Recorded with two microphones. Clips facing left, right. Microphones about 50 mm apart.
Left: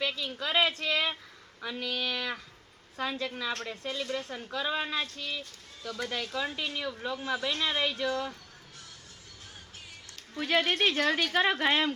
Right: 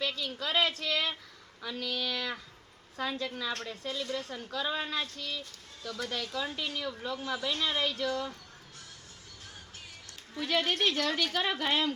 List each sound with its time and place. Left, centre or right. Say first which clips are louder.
0.0 s a woman's voice: left 1 dB; centre
10.4 s speech: left 2 dB; left